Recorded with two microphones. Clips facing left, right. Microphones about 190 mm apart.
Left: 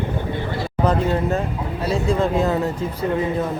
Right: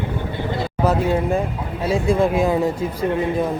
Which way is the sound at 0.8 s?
10° right (ahead or behind).